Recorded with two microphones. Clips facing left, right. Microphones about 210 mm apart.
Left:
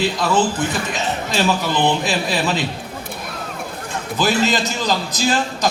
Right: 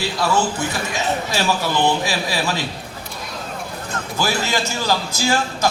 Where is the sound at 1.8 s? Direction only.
20° left (ahead or behind).